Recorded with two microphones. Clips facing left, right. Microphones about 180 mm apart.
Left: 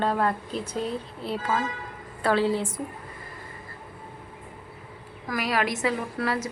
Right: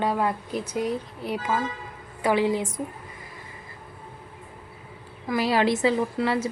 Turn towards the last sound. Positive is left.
turn(degrees=-30)  # may be behind; listen again after turning